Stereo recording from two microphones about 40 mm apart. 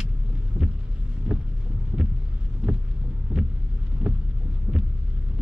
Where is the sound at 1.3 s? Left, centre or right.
Right.